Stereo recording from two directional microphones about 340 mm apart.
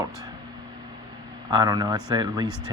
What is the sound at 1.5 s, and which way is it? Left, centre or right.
Speech, centre.